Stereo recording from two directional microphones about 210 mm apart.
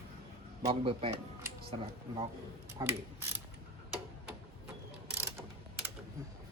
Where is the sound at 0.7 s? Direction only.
30° right (ahead or behind).